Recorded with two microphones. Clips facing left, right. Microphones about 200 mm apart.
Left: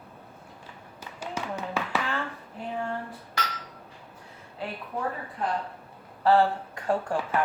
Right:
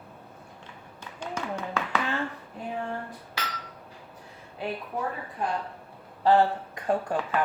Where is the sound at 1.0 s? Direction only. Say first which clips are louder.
Even; 5° left (ahead or behind).